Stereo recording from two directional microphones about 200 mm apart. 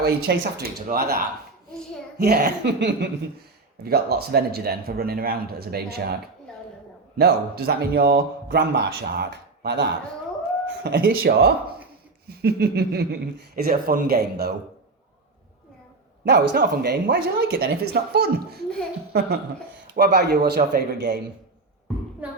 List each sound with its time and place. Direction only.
0.0 s speech: 55° right (ahead or behind)
7.2 s speech: 55° right (ahead or behind)
16.2 s speech: 60° right (ahead or behind)
22.2 s a sound: 5° right (ahead or behind)